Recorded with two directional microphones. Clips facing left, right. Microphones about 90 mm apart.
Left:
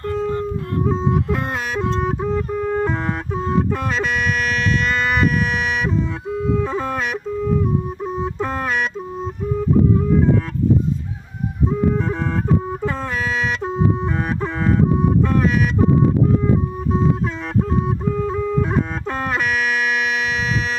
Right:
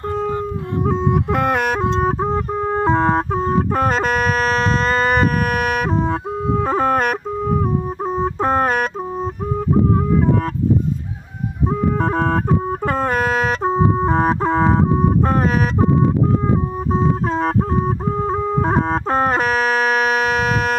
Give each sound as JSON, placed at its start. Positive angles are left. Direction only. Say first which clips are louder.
{"t": 0.9, "sound": "music", "louder": "right 2 dB", "side_deg": -60}
{"t": 1.8, "sound": "music", "louder": "right 3 dB", "side_deg": -40}
{"t": 9.6, "sound": "music", "louder": "even", "side_deg": -55}
{"t": 11.7, "sound": "music", "louder": "right 2 dB", "side_deg": -55}
{"t": 16.9, "sound": "music", "louder": "right 2 dB", "side_deg": -40}